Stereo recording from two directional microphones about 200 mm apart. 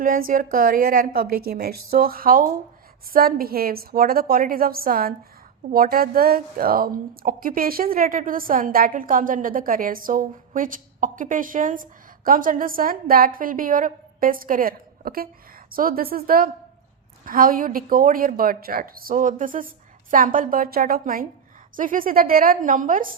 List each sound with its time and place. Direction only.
0.0 s a woman's voice: 45° right (ahead or behind)